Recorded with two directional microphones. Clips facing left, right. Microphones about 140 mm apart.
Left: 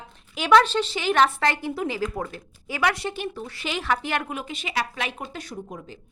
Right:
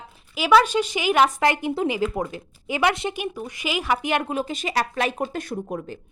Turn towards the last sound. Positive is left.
turn(degrees=-55)  # may be behind; listen again after turning